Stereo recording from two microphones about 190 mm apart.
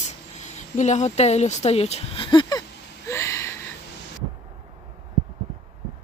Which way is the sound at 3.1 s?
15° left (ahead or behind).